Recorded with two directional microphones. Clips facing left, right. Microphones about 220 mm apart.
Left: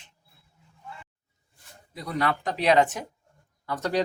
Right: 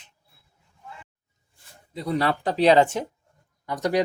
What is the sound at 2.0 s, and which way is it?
Speech, 30° right (ahead or behind).